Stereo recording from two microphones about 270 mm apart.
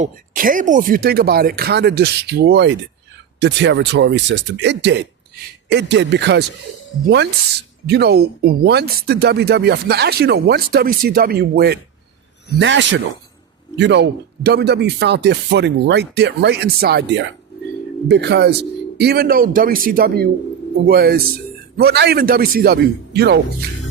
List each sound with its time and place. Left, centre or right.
0.0 s speech: right
7.9 s speech: right